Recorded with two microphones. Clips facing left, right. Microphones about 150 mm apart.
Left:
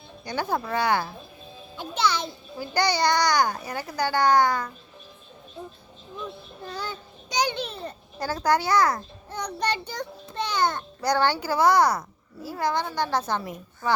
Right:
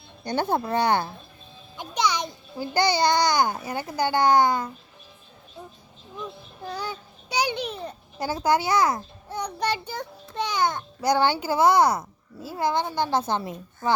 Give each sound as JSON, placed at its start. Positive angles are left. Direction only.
{"t": 0.3, "sound": "a child's voice", "side_deg": -25}
{"t": 6.7, "sound": "a child's voice", "side_deg": -10}